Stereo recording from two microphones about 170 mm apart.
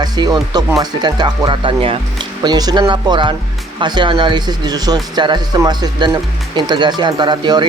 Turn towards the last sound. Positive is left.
turn(degrees=-25)  # may be behind; listen again after turning